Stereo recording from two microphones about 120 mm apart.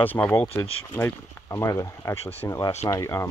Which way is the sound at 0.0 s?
15° left (ahead or behind).